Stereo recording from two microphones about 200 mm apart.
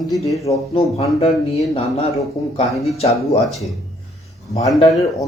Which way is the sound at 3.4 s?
Centre (ahead or behind).